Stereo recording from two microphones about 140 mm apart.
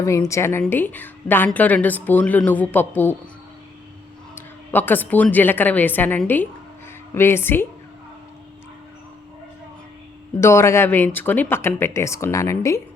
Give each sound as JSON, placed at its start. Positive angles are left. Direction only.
{"t": 0.0, "sound": "a woman's voice", "side_deg": 20}
{"t": 4.4, "sound": "a woman's voice", "side_deg": 15}
{"t": 10.4, "sound": "speech", "side_deg": 20}